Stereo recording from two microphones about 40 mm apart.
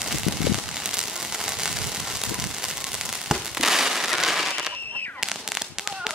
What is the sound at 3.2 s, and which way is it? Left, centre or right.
Fireworks, centre.